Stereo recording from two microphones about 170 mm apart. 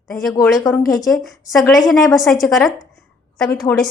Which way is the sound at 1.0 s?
Centre (ahead or behind).